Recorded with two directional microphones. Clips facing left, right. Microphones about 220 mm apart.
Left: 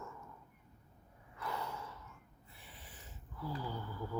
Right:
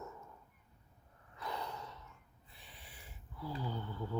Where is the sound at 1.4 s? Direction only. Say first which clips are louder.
Left 1 dB; 15° right (ahead or behind).